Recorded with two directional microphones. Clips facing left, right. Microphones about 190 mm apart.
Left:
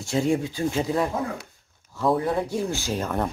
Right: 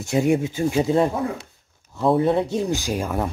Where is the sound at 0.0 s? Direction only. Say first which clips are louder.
Right 4 dB; 20° right (ahead or behind).